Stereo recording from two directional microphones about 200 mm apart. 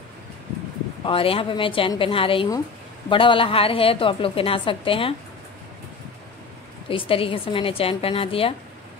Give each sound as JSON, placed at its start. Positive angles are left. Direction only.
{"t": 1.0, "sound": "a woman's voice", "side_deg": 25}
{"t": 6.9, "sound": "a woman's voice", "side_deg": 25}